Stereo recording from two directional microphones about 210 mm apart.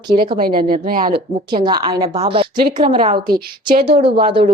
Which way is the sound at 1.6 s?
20° right (ahead or behind).